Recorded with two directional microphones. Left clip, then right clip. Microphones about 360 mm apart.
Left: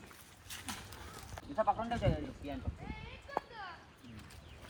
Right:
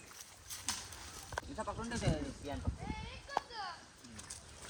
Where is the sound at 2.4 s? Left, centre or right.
Right.